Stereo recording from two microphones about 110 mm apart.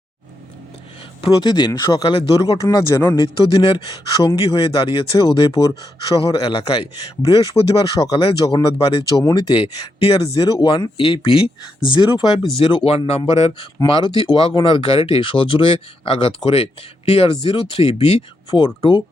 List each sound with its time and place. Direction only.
1.2 s speech: 45° left (ahead or behind)
2.4 s speech: 35° left (ahead or behind)
3.2 s speech: 50° left (ahead or behind)
10.9 s speech: 50° left (ahead or behind)
12.5 s speech: 55° left (ahead or behind)
13.8 s speech: 50° left (ahead or behind)